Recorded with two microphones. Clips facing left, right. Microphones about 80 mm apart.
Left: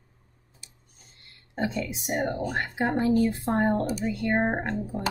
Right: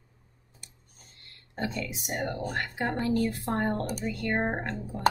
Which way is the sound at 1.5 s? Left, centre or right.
Left.